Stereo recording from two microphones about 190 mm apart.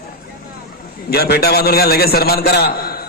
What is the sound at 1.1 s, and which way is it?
A man's voice, 55° left (ahead or behind).